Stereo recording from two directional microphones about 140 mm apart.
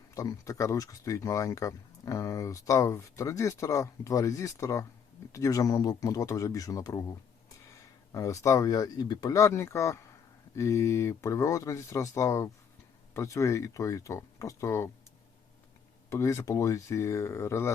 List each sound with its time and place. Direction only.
0.1 s speech: 25° left (ahead or behind)
8.1 s speech: 25° left (ahead or behind)
16.0 s speech: 20° left (ahead or behind)